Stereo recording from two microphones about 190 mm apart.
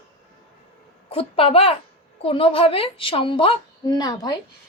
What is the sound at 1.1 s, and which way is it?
A woman's voice, 30° left (ahead or behind).